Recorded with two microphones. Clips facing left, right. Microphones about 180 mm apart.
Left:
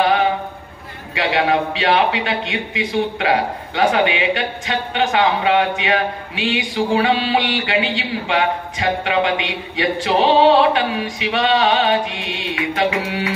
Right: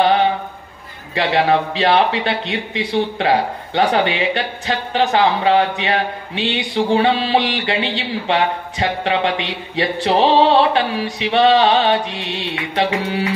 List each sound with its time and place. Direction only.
1.1 s a man's voice: 35° right (ahead or behind)